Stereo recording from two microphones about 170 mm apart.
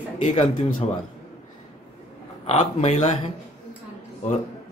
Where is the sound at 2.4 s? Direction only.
40° left (ahead or behind).